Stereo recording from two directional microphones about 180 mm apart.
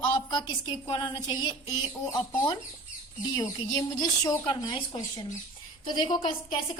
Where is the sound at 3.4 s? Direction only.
20° left (ahead or behind).